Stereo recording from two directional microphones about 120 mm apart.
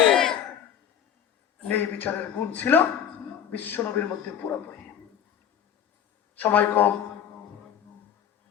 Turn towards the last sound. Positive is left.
turn(degrees=15)  # may be behind; listen again after turning